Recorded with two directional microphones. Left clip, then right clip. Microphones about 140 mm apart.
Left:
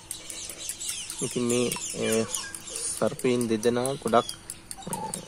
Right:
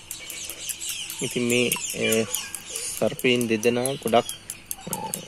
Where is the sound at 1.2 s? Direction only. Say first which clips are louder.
Right 2 dB; 30° right (ahead or behind).